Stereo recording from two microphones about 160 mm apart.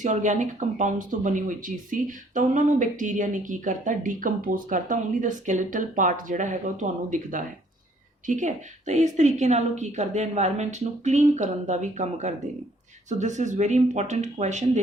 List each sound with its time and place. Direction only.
0.0 s speech: 50° right (ahead or behind)